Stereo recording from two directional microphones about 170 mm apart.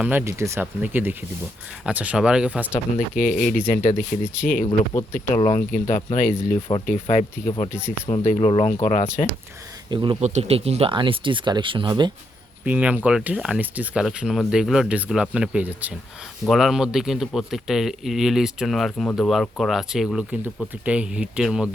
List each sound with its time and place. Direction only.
0.0 s speech: 10° right (ahead or behind)
3.2 s speech: 50° left (ahead or behind)
4.6 s speech: 30° left (ahead or behind)
6.6 s speech: 30° left (ahead or behind)
7.7 s speech: 5° right (ahead or behind)
8.1 s speech: 40° left (ahead or behind)
9.9 s speech: 25° right (ahead or behind)
10.2 s speech: 40° right (ahead or behind)
12.6 s speech: 10° right (ahead or behind)